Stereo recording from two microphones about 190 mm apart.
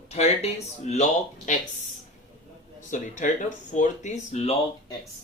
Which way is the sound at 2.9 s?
40° left (ahead or behind).